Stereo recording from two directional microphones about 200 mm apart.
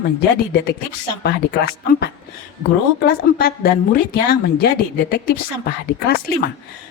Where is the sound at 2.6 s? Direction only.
50° left (ahead or behind).